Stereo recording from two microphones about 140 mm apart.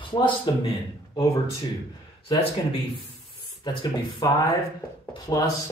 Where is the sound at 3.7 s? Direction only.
30° left (ahead or behind).